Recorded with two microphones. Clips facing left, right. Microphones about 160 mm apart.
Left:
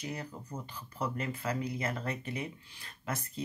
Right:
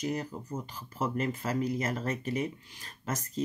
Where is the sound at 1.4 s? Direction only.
45° right (ahead or behind).